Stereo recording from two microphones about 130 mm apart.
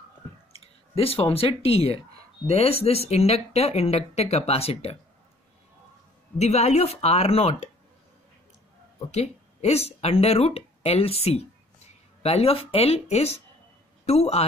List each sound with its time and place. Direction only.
0.5 s speech: 50° left (ahead or behind)
6.3 s speech: 55° left (ahead or behind)
9.1 s speech: 55° left (ahead or behind)